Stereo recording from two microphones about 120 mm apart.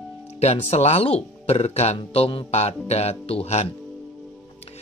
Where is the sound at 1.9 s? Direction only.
50° left (ahead or behind).